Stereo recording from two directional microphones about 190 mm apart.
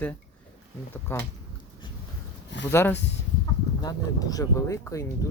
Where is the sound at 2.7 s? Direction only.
10° left (ahead or behind).